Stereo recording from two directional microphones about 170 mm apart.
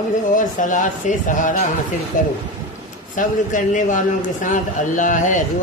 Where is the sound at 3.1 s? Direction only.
50° left (ahead or behind).